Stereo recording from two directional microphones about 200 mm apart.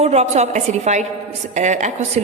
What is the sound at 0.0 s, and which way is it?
A woman's voice, 30° right (ahead or behind).